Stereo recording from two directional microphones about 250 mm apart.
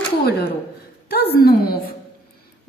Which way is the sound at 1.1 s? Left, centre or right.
Left.